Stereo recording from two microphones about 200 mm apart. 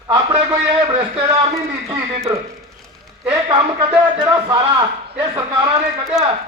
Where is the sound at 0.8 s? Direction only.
20° right (ahead or behind).